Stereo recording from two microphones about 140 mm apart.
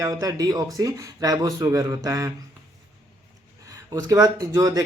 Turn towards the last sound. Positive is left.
turn(degrees=-25)  # may be behind; listen again after turning